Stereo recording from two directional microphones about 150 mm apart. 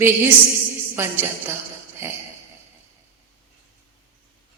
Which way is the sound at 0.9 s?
15° right (ahead or behind).